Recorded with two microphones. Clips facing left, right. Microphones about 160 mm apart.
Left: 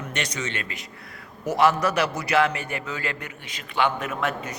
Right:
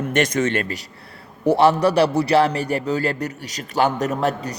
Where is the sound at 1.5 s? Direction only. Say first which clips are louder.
Right 5 dB; 30° right (ahead or behind).